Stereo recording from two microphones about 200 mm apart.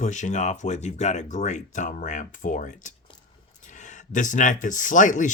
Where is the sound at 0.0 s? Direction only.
35° left (ahead or behind).